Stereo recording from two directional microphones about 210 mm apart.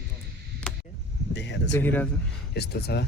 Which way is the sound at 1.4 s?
55° left (ahead or behind).